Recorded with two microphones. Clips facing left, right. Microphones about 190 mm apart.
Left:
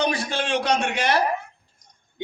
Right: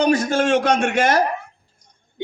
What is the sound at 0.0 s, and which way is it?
A man's voice, 45° right (ahead or behind).